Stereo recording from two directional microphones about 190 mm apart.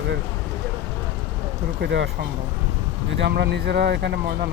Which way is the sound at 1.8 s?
65° right (ahead or behind).